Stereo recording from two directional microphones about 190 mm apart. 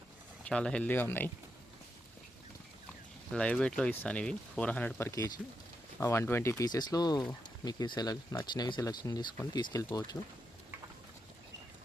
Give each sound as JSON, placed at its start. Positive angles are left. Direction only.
{"t": 0.4, "sound": "speech", "side_deg": 5}
{"t": 3.3, "sound": "speech", "side_deg": 5}